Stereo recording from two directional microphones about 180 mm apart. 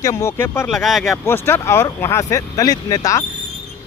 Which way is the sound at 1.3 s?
10° left (ahead or behind).